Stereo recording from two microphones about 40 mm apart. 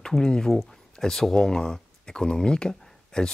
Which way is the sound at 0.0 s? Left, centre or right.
Centre.